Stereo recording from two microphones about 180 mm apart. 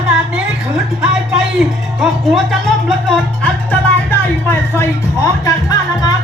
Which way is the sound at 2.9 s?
5° left (ahead or behind).